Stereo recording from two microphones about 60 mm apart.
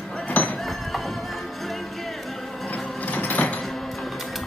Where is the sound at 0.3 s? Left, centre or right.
Left.